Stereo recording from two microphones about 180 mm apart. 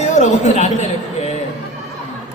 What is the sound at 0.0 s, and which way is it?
Speech, 40° left (ahead or behind).